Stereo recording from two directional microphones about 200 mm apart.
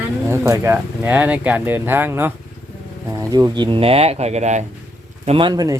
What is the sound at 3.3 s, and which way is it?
Speech, 20° right (ahead or behind).